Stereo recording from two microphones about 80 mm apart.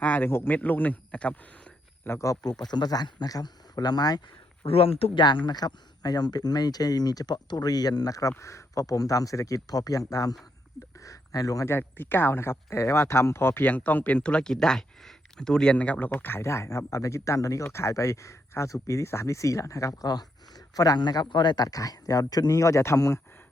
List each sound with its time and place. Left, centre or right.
0.0 s a sound: left
0.3 s a man's voice: left
0.5 s speech: left
2.0 s speech: left
5.1 s speech: left
5.5 s speech: left
11.6 s speech: left
16.4 s speech: left